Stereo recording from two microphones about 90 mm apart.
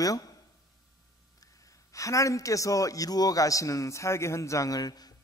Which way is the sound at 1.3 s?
40° left (ahead or behind).